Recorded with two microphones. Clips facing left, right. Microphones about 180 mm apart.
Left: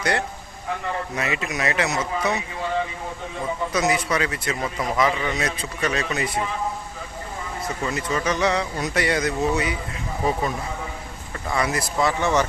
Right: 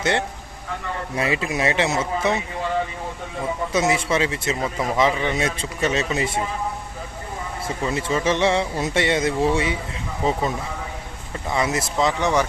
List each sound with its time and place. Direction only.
0.0 s speech: 25° right (ahead or behind)
3.7 s speech: 25° right (ahead or behind)
7.9 s speech: 25° right (ahead or behind)
11.4 s speech: 20° right (ahead or behind)